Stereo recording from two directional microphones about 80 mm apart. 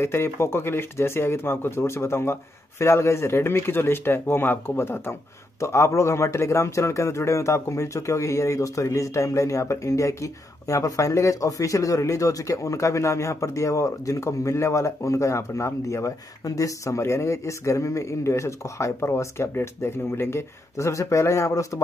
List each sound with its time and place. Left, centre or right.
0.0 s a man's voice: left